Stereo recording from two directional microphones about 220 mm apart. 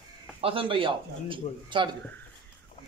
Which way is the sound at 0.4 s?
25° right (ahead or behind).